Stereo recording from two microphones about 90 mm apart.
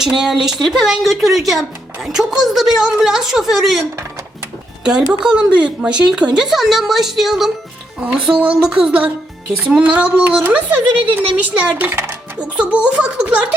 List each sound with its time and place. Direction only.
0.0 s a woman's voice: 5° right (ahead or behind); by 12.1 s 25° right (ahead or behind)
12.5 s speech: 15° right (ahead or behind)